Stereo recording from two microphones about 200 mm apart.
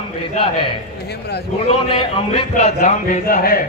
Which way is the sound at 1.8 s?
25° left (ahead or behind).